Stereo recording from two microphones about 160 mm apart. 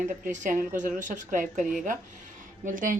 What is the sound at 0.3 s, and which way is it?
A woman's voice, 50° right (ahead or behind).